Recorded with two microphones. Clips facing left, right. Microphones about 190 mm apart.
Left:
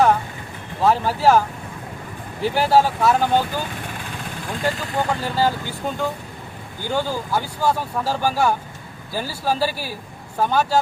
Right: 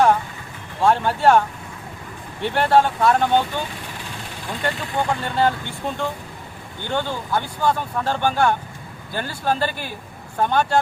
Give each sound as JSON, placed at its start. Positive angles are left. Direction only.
{"t": 0.8, "sound": "speech", "side_deg": 0}
{"t": 4.6, "sound": "speech", "side_deg": 5}